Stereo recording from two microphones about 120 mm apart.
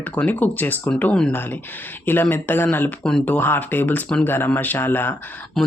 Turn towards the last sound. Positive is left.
turn(degrees=20)  # may be behind; listen again after turning